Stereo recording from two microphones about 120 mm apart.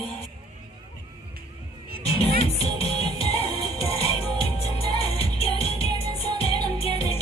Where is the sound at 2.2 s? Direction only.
55° left (ahead or behind).